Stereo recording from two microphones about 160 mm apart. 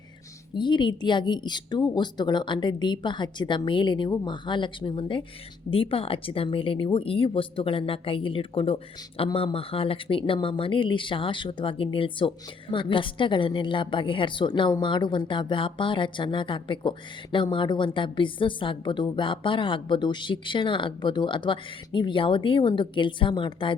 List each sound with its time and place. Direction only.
0.5 s a woman's voice: 30° left (ahead or behind)